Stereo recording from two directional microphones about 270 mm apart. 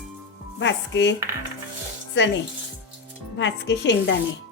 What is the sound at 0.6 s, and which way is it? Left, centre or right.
Speech, left.